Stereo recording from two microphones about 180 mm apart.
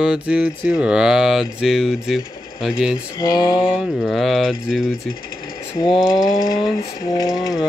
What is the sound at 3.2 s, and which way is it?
Speech, 25° left (ahead or behind).